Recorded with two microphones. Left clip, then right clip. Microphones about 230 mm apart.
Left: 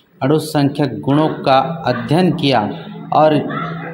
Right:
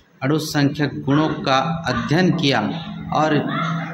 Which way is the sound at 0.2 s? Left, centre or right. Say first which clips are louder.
Left 5 dB; centre.